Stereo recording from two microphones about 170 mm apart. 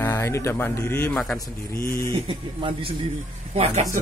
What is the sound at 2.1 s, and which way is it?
A man's voice, 30° right (ahead or behind).